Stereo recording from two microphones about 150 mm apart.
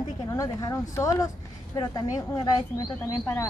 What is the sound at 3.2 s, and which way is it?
Frog, 15° left (ahead or behind).